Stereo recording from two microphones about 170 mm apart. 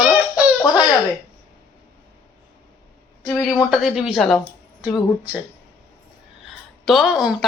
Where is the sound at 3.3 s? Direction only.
20° left (ahead or behind).